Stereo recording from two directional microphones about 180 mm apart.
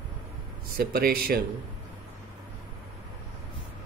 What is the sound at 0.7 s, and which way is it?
Speech, 55° right (ahead or behind).